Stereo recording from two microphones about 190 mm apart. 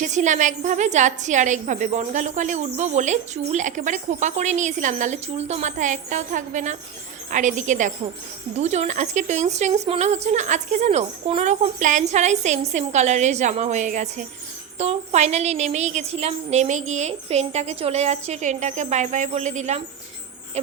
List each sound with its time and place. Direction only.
0.0 s a woman's voice: 40° right (ahead or behind)